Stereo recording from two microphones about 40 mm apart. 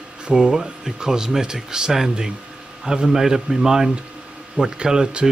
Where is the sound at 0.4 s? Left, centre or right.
Centre.